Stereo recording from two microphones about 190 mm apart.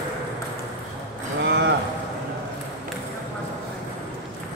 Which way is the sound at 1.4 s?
65° right (ahead or behind).